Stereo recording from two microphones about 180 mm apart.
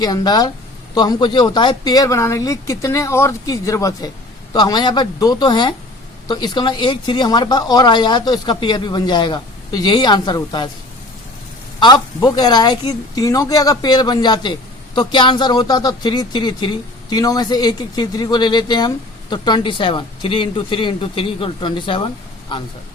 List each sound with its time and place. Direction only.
0.0 s speech: 25° left (ahead or behind)
11.8 s speech: 25° left (ahead or behind)